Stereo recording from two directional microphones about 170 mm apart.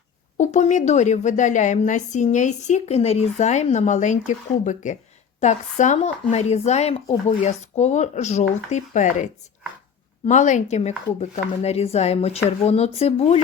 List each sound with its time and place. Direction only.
0.3 s a woman's voice: 45° left (ahead or behind)